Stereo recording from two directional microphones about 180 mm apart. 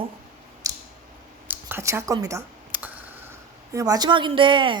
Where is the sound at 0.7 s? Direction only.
20° right (ahead or behind).